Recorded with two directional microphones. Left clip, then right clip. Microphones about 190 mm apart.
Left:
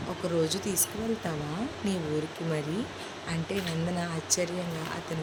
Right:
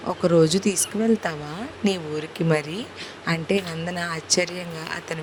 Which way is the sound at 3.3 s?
50° right (ahead or behind).